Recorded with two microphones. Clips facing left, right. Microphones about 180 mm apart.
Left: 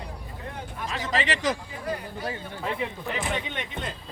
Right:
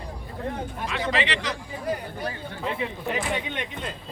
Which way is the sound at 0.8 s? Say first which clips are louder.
Right 1 dB; 40° left (ahead or behind).